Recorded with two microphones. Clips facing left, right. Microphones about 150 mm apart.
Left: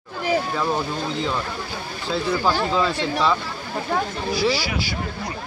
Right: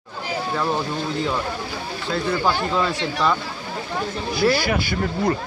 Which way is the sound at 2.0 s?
Centre (ahead or behind).